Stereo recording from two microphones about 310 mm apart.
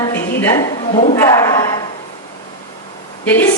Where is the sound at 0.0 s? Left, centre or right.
Centre.